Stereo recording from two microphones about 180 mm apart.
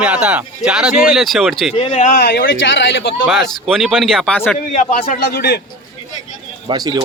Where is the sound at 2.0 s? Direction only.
55° left (ahead or behind); by 3.0 s 90° left.